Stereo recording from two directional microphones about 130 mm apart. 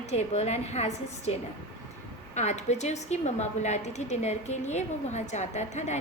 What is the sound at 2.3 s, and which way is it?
A woman's voice, 60° left (ahead or behind).